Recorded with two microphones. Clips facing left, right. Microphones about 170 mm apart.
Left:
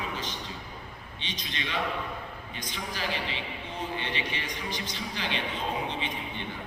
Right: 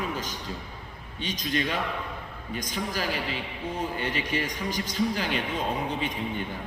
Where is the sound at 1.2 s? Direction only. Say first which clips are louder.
Right 9 dB; 45° right (ahead or behind).